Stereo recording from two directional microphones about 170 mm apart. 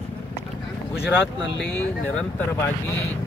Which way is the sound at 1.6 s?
10° left (ahead or behind).